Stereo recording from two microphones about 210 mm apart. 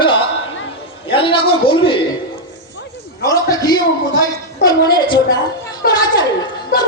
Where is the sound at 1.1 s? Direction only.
25° left (ahead or behind).